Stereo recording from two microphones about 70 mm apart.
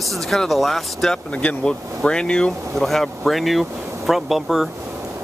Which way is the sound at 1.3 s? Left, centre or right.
Centre.